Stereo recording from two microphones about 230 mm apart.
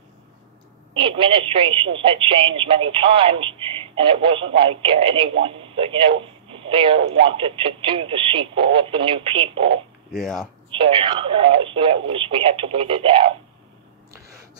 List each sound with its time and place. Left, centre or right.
0.9 s speech: right
6.5 s radio: right
7.2 s speech: right
10.1 s speech: centre
10.7 s speech: right